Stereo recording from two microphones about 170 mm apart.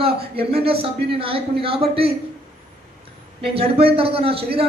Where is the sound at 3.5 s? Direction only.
35° right (ahead or behind).